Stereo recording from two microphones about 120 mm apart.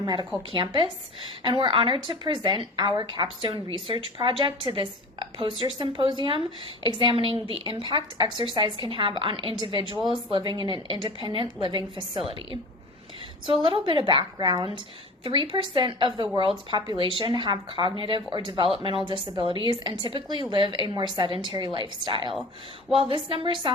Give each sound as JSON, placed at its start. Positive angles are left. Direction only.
{"t": 0.0, "sound": "a woman's voice", "side_deg": -40}
{"t": 13.5, "sound": "a woman's voice", "side_deg": -45}
{"t": 15.2, "sound": "a woman's voice", "side_deg": -45}